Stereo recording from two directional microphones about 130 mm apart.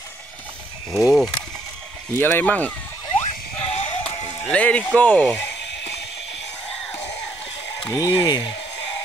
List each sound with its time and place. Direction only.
0.9 s speech: 5° right (ahead or behind)
2.1 s speech: 15° left (ahead or behind)
3.6 s music: 45° left (ahead or behind)
4.5 s speech: 10° left (ahead or behind)
6.9 s music: 55° left (ahead or behind)
7.9 s speech: 25° left (ahead or behind)